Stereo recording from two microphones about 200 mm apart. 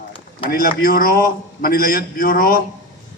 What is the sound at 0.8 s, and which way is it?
A man's voice, 45° left (ahead or behind).